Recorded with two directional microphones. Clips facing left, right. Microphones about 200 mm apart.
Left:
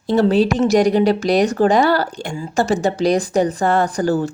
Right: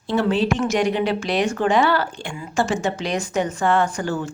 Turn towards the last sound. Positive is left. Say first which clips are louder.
# left 5 dB
turn(degrees=35)  # may be behind; listen again after turning